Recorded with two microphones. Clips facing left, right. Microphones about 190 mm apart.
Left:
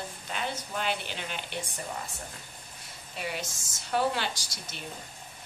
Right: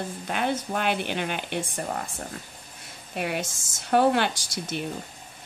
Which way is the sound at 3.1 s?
60° right (ahead or behind).